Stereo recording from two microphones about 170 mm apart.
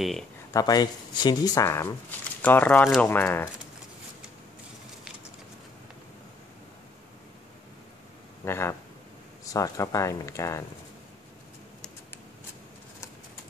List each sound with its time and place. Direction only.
0.5 s speech: 20° left (ahead or behind)
8.5 s speech: 15° left (ahead or behind)